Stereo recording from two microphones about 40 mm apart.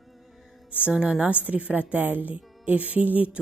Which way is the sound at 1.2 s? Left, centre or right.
Right.